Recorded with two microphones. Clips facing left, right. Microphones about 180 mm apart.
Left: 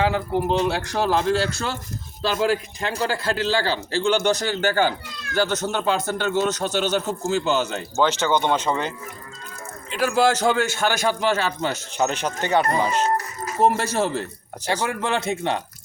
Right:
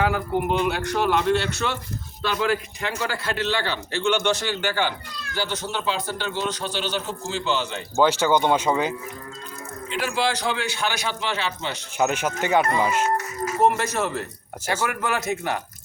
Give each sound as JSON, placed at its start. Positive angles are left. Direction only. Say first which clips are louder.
{"t": 0.0, "sound": "a man's voice", "louder": "left 1 dB", "side_deg": 30}
{"t": 7.9, "sound": "speech", "louder": "right 2 dB", "side_deg": -10}
{"t": 9.9, "sound": "a man's voice", "louder": "left 5 dB", "side_deg": 45}
{"t": 11.9, "sound": "speech", "louder": "right 2 dB", "side_deg": -10}
{"t": 12.6, "sound": "speech", "louder": "left 1 dB", "side_deg": 35}